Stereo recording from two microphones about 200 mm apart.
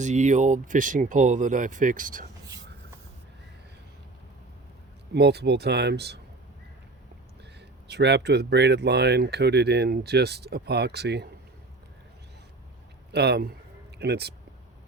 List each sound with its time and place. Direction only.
0.0 s speech: 35° right (ahead or behind)
5.1 s speech: 55° right (ahead or behind)
7.9 s speech: 55° right (ahead or behind)
13.1 s a man's voice: 55° right (ahead or behind)